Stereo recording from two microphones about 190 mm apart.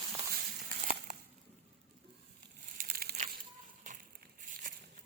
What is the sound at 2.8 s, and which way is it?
Crumpling, 50° right (ahead or behind).